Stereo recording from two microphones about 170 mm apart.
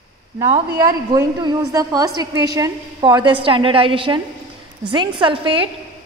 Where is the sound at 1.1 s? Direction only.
20° right (ahead or behind).